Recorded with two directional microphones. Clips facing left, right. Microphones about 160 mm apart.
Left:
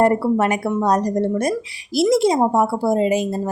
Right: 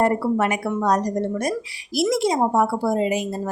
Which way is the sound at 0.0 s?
35° left (ahead or behind).